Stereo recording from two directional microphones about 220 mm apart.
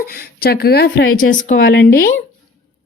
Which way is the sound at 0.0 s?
45° left (ahead or behind).